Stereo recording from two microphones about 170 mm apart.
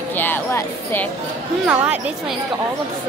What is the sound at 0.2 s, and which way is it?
Music, 15° left (ahead or behind).